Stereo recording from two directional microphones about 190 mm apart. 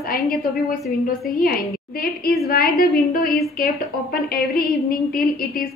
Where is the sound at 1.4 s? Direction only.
50° left (ahead or behind).